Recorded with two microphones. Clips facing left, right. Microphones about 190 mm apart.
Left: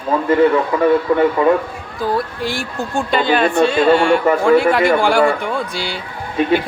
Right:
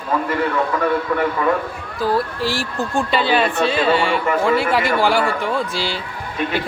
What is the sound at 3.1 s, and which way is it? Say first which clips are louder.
Speech: left 4 dB; 50° left (ahead or behind).